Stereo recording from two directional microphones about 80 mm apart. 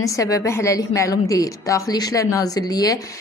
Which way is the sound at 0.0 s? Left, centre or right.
Left.